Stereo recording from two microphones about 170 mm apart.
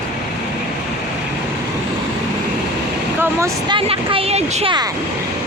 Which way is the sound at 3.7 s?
30° right (ahead or behind).